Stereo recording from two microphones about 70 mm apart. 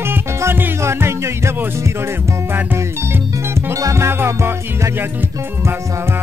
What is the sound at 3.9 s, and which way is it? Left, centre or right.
Music, right.